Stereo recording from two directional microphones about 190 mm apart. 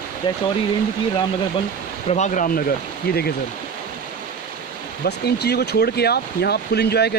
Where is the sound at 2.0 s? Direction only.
40° left (ahead or behind); by 3.2 s 55° left (ahead or behind).